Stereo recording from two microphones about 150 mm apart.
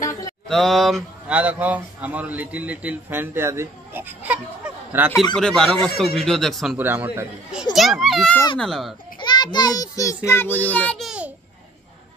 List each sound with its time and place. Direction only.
0.5 s a man's voice: centre (ahead or behind)
5.3 s speech: 5° left (ahead or behind)
6.8 s speech: 15° right (ahead or behind)
7.7 s speech: centre (ahead or behind)
9.2 s a child's voice: 30° left (ahead or behind); by 11.1 s 10° left (ahead or behind)
11.1 s babbling: 10° right (ahead or behind)